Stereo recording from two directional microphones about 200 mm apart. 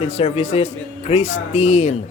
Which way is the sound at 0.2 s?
30° left (ahead or behind).